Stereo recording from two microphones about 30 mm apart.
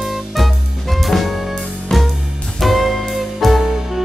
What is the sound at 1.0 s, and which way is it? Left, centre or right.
Jazz, centre.